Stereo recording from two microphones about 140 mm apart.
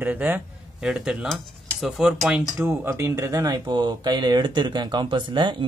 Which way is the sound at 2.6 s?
15° right (ahead or behind).